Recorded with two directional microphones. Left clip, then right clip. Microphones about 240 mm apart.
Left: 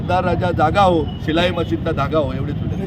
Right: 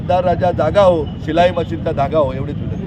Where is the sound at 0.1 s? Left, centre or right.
Centre.